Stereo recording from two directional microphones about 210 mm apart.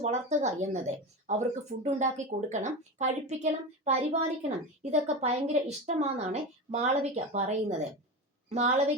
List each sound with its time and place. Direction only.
0.0 s speech: 35° right (ahead or behind)